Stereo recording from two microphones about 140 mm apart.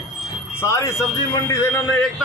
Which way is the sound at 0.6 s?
20° left (ahead or behind).